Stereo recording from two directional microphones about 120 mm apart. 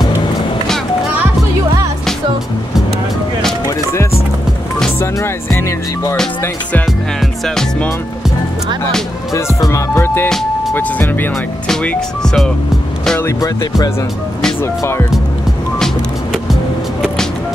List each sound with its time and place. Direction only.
3.6 s music: 25° left (ahead or behind)
6.9 s music: centre (ahead or behind)
9.3 s music: 25° left (ahead or behind)
10.7 s speech: 15° left (ahead or behind)
11.7 s music: 10° left (ahead or behind)
13.2 s music: 30° left (ahead or behind)